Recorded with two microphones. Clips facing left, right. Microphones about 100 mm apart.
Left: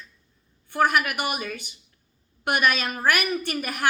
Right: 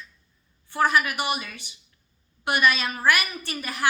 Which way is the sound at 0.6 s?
55° left (ahead or behind).